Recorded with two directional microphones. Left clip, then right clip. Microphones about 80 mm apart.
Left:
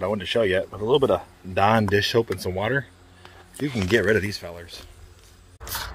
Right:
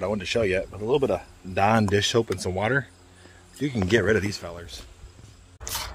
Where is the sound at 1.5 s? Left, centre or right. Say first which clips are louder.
Left 2 dB; right.